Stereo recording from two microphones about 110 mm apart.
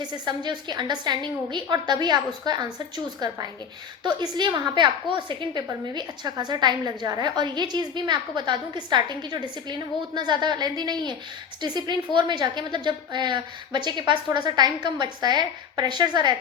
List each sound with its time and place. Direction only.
0.3 s a woman's voice: 40° right (ahead or behind)